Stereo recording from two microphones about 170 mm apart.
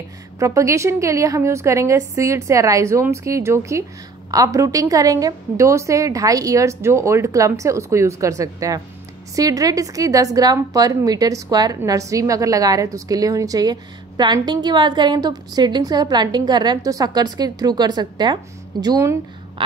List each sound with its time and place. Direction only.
0.4 s a woman's voice: 15° right (ahead or behind)